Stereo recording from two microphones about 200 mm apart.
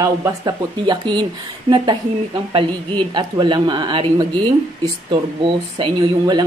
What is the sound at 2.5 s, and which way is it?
Speech, 25° right (ahead or behind).